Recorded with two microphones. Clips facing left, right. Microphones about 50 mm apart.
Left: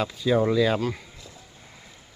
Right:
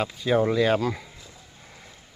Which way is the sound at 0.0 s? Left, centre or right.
Right.